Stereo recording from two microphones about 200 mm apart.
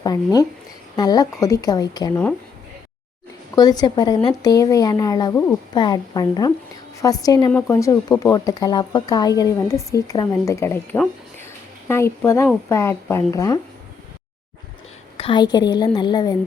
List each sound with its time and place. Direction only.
0.0 s a woman's voice: 20° left (ahead or behind)
3.5 s a woman's voice: 20° left (ahead or behind)
15.2 s a woman's voice: 25° left (ahead or behind)